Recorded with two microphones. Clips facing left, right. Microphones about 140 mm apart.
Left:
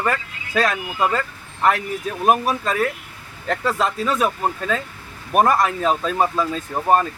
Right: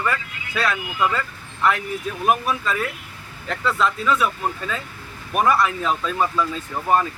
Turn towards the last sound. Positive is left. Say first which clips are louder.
# left 2 dB
turn(degrees=40)  # may be behind; listen again after turning